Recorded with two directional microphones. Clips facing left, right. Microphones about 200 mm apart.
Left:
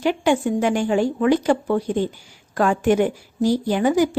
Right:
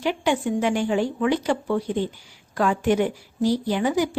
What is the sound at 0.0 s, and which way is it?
A woman's voice, 45° left (ahead or behind).